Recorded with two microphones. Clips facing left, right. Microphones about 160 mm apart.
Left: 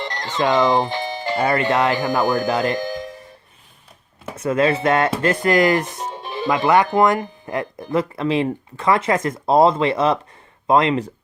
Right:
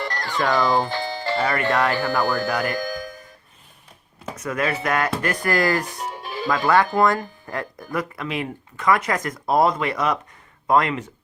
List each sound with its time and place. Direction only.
0.0 s speech: 20° left (ahead or behind)
4.4 s speech: 25° left (ahead or behind)